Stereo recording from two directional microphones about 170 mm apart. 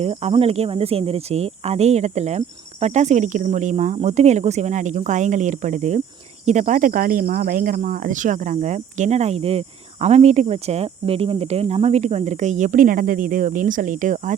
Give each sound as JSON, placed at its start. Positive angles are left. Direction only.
{"t": 0.0, "sound": "speech", "side_deg": -35}